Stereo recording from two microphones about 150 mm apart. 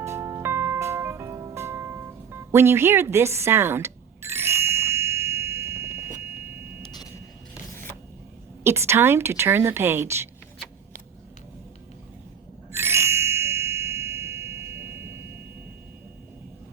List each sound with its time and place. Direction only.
0.0 s music: 20° right (ahead or behind)
2.5 s a sound: 15° right (ahead or behind)
8.6 s a woman's voice: 15° right (ahead or behind)
12.7 s ding: 15° right (ahead or behind)